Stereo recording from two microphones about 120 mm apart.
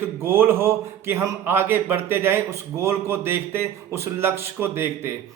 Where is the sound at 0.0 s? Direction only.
20° right (ahead or behind).